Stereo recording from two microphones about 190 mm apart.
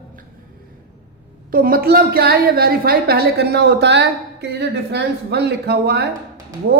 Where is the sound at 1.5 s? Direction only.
50° right (ahead or behind).